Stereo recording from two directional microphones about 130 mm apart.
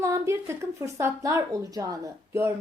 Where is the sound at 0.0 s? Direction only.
20° right (ahead or behind).